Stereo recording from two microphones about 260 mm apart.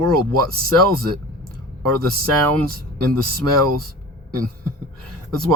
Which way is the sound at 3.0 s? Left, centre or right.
Right.